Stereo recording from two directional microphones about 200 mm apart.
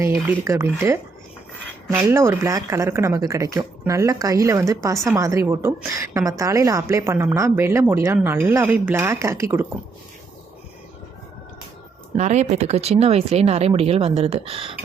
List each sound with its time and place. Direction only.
0.3 s a woman's voice: 15° right (ahead or behind)
2.0 s a woman's voice: 15° right (ahead or behind)
12.1 s speech: 35° right (ahead or behind)